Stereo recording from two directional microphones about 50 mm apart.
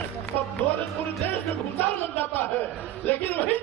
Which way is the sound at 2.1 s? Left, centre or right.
Left.